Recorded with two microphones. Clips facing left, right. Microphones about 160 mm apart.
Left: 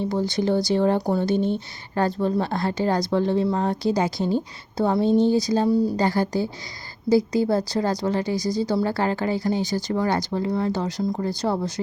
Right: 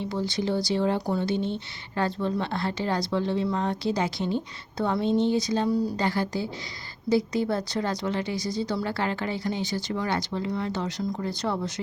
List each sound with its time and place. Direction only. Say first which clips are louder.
0.0 s speech: left 5 dB; 45° left (ahead or behind); by 6.1 s 30° left (ahead or behind)
6.1 s speech: left 5 dB; 40° left (ahead or behind)